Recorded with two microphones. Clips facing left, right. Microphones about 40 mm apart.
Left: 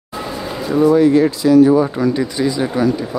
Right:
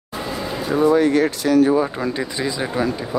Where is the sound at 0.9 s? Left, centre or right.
Right.